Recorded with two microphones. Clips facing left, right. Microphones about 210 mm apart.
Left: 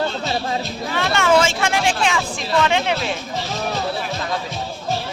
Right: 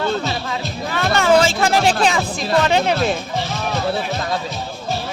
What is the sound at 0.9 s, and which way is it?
Music, 40° right (ahead or behind).